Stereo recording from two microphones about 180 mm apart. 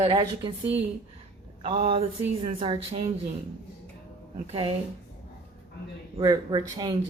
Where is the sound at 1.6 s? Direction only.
30° right (ahead or behind).